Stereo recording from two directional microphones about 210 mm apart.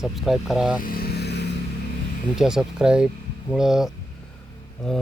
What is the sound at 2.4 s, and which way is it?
Speech, 5° right (ahead or behind).